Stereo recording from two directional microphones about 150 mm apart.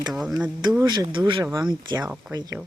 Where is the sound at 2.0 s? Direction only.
5° right (ahead or behind).